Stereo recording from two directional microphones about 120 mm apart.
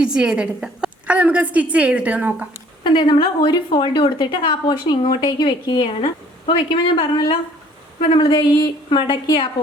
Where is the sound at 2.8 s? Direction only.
40° left (ahead or behind).